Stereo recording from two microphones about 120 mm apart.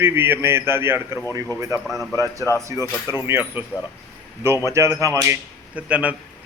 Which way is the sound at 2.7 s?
30° right (ahead or behind).